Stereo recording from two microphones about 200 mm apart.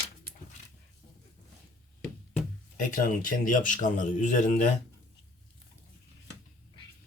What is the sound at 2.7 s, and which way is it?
Speech, 40° left (ahead or behind).